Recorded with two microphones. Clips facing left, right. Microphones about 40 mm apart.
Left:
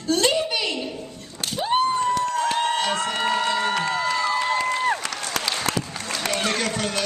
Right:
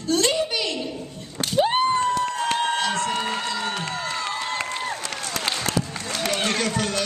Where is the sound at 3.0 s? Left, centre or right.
Left.